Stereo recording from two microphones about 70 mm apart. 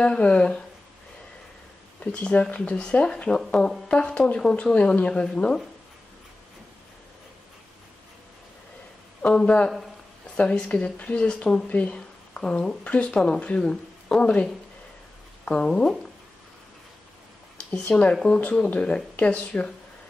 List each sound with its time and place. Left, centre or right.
0.0 s speech: centre
2.1 s speech: centre
9.2 s speech: centre
17.6 s speech: centre